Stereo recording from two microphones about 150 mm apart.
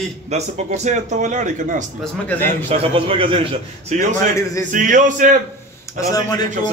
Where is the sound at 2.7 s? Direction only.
40° right (ahead or behind).